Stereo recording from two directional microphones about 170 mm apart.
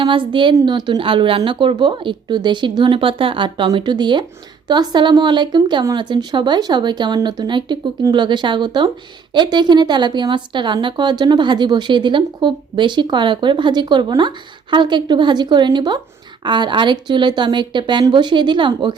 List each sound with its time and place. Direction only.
0.0 s a woman's voice: 30° right (ahead or behind)